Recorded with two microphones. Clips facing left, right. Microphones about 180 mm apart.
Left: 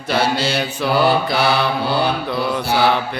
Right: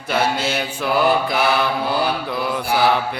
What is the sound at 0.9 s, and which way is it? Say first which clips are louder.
Mantra: left 1 dB; 30° left (ahead or behind).